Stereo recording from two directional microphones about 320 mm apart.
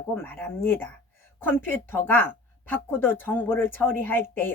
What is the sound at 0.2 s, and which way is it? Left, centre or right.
A woman's voice, centre.